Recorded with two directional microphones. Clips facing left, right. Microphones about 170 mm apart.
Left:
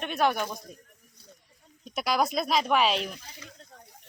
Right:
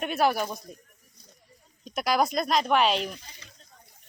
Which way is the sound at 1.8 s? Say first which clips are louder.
Right 2 dB; centre (ahead or behind).